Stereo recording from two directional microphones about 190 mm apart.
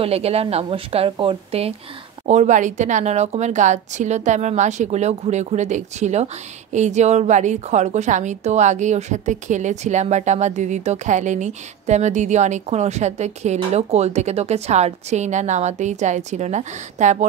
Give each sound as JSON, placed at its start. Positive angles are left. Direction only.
{"t": 0.0, "sound": "speech", "side_deg": -30}